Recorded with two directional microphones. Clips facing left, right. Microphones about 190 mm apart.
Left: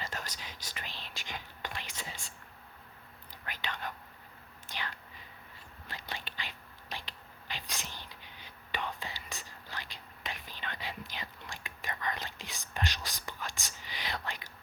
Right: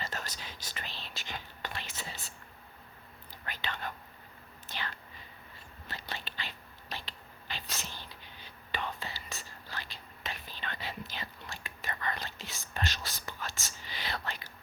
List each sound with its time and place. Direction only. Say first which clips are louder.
0.0 s whispering: right 1 dB; 10° left (ahead or behind)
3.4 s whispering: right 1 dB; 10° left (ahead or behind)